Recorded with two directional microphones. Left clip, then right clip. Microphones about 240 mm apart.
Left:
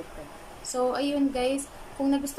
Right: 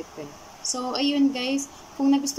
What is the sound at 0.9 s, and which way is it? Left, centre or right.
Speech, centre.